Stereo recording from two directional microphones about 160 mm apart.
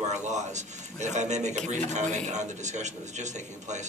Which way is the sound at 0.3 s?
45° right (ahead or behind).